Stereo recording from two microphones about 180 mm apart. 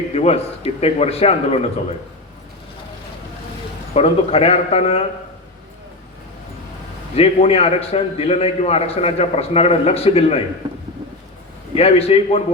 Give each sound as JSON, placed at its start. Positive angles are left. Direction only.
{"t": 0.1, "sound": "a man's voice", "side_deg": 35}
{"t": 3.9, "sound": "a man's voice", "side_deg": 35}
{"t": 7.2, "sound": "a man's voice", "side_deg": 35}
{"t": 11.7, "sound": "a man's voice", "side_deg": 35}